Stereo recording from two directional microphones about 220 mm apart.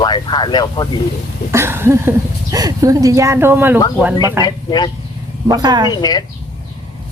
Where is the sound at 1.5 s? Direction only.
10° right (ahead or behind).